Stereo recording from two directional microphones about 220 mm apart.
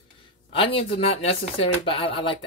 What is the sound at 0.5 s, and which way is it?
Speech, 25° left (ahead or behind).